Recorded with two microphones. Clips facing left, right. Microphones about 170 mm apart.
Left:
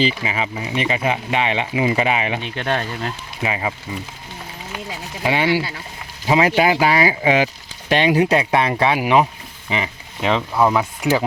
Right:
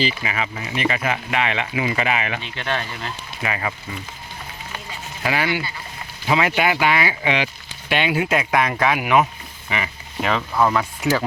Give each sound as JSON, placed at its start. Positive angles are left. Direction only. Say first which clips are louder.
{"t": 0.2, "sound": "speech", "louder": "left 2 dB", "side_deg": 20}
{"t": 2.6, "sound": "speech", "louder": "left 4 dB", "side_deg": 40}
{"t": 3.4, "sound": "speech", "louder": "left 3 dB", "side_deg": 20}
{"t": 5.2, "sound": "speech", "louder": "left 4 dB", "side_deg": 25}